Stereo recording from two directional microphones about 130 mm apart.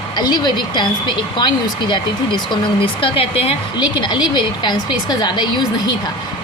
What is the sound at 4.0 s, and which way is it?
A woman's voice, 35° left (ahead or behind).